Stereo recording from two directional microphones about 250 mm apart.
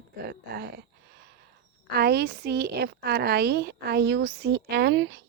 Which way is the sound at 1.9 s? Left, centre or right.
Right.